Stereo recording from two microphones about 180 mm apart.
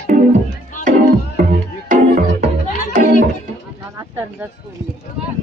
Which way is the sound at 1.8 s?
45° right (ahead or behind).